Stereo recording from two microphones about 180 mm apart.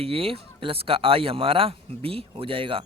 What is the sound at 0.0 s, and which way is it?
Speech, 30° right (ahead or behind).